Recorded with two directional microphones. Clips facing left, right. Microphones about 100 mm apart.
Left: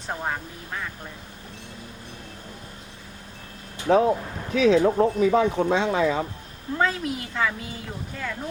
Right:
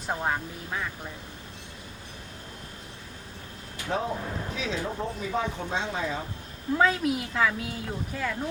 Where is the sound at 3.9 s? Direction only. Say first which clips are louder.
Left 10 dB; 65° left (ahead or behind); by 6.2 s 80° left.